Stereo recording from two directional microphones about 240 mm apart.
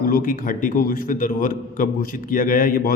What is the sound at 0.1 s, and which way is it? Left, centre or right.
A man's voice, left.